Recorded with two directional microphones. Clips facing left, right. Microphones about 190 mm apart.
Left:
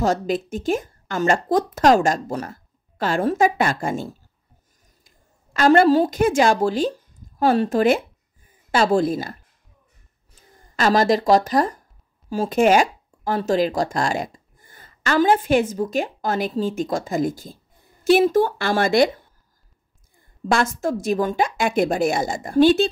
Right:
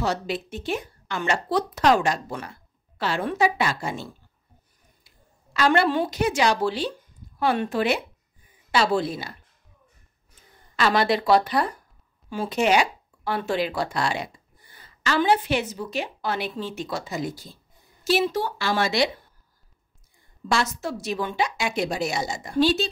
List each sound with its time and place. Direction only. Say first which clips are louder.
0.0 s a woman's voice: left 6 dB; 45° left (ahead or behind)
10.8 s speech: left 4 dB; 45° left (ahead or behind)
20.2 s speech: left 4 dB; 50° left (ahead or behind)